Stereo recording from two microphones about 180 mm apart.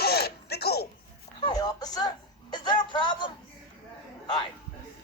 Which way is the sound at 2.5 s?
25° left (ahead or behind).